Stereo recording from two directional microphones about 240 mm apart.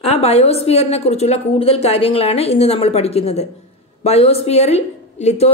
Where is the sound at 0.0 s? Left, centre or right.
Left.